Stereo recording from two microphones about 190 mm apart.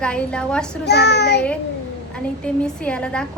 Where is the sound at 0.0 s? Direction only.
5° left (ahead or behind).